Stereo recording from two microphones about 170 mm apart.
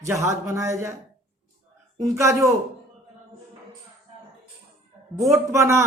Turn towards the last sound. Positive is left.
turn(degrees=-15)  # may be behind; listen again after turning